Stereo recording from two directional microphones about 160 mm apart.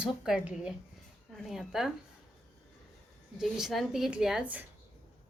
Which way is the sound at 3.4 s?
Centre (ahead or behind).